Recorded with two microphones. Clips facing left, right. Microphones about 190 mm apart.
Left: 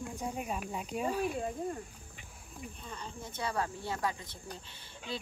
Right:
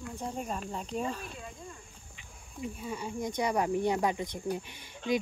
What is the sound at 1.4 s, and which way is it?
Speech, 45° left (ahead or behind).